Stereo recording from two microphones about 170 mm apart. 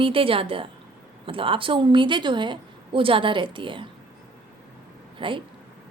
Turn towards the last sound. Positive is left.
turn(degrees=-30)  # may be behind; listen again after turning